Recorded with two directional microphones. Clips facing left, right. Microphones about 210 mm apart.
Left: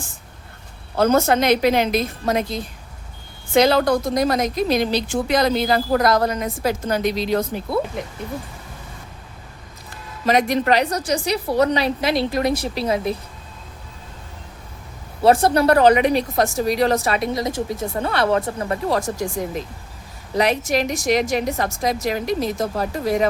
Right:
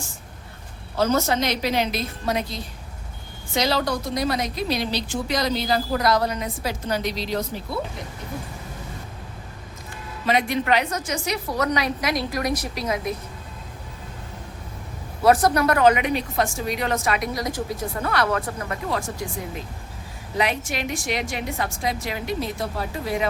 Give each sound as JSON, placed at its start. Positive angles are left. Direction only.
{"t": 0.9, "sound": "a woman's voice", "side_deg": 55}
{"t": 10.2, "sound": "a woman's voice", "side_deg": 40}
{"t": 15.2, "sound": "speech", "side_deg": 25}
{"t": 20.3, "sound": "speech", "side_deg": 40}